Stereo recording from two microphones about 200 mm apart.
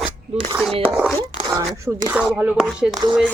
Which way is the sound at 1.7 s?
10° right (ahead or behind).